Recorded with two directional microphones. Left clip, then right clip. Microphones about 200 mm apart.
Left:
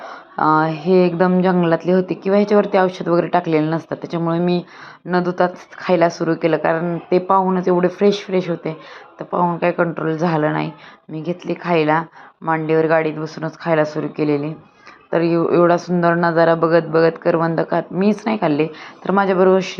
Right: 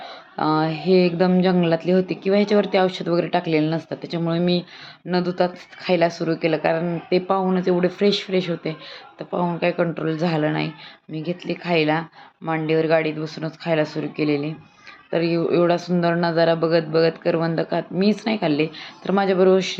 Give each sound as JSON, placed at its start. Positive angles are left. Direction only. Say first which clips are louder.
{"t": 0.0, "sound": "speech", "louder": "left 6 dB", "side_deg": 5}
{"t": 11.2, "sound": "a woman's voice", "louder": "left 3 dB", "side_deg": 30}
{"t": 11.6, "sound": "speech", "louder": "left 4 dB", "side_deg": 5}